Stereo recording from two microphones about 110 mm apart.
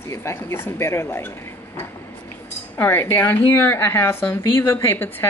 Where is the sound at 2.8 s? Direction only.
20° left (ahead or behind).